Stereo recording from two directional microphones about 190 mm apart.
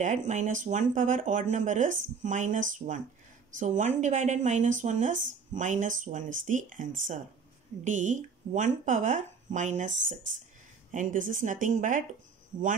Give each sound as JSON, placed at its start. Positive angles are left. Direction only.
{"t": 0.0, "sound": "speech", "side_deg": -40}
{"t": 10.9, "sound": "speech", "side_deg": -40}